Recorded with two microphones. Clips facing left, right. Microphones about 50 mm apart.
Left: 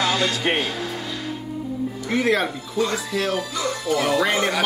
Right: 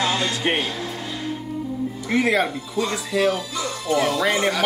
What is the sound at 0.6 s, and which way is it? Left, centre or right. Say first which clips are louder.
Speech: left 1 dB; left.